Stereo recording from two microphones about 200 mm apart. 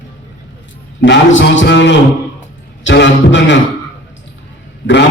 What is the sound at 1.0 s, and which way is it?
A man's voice, 65° left (ahead or behind).